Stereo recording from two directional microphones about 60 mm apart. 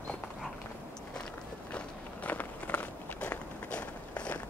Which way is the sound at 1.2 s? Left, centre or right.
Centre.